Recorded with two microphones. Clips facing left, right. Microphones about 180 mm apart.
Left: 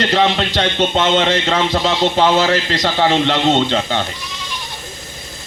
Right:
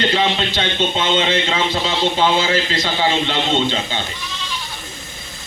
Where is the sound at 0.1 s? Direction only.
45° left (ahead or behind).